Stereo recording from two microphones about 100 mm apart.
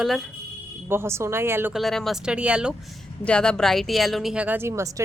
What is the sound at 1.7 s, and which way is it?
A woman's voice, centre (ahead or behind).